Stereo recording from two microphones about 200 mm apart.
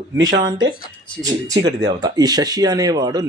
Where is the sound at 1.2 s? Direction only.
15° right (ahead or behind).